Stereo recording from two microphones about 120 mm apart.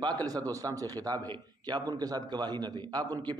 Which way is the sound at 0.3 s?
30° right (ahead or behind).